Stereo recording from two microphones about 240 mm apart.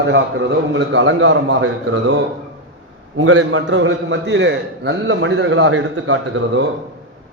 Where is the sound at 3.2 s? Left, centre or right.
Right.